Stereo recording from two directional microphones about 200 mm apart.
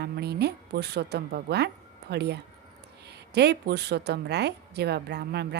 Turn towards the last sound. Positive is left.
turn(degrees=-55)  # may be behind; listen again after turning